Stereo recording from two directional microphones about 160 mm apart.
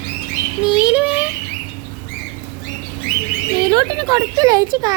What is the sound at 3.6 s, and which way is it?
Speech, 25° right (ahead or behind).